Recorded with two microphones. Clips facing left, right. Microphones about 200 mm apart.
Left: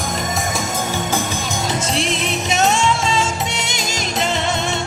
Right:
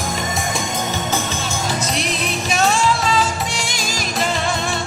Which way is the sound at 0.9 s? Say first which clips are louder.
Left 1 dB; 15° left (ahead or behind).